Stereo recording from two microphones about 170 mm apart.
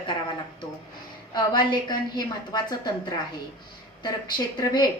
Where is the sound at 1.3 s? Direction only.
25° left (ahead or behind).